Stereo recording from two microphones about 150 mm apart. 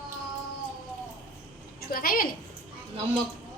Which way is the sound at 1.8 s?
75° left (ahead or behind).